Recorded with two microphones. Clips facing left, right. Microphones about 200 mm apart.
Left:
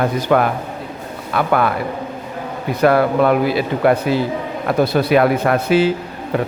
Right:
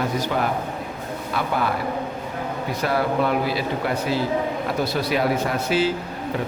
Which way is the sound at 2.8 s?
60° left (ahead or behind).